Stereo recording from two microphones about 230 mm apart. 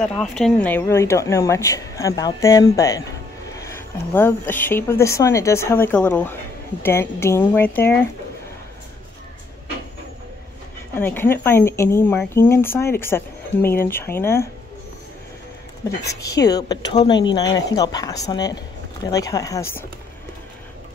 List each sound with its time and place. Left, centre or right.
0.0 s speech: centre
11.0 s speech: centre
16.1 s speech: centre